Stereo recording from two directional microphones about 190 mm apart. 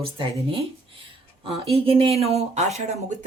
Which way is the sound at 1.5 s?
30° right (ahead or behind).